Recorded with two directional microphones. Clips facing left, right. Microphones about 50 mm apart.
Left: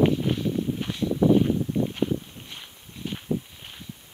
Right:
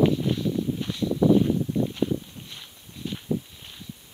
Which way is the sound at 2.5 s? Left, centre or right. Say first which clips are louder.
Left 1 dB; left.